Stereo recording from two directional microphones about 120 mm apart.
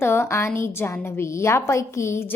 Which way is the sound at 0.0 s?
20° left (ahead or behind).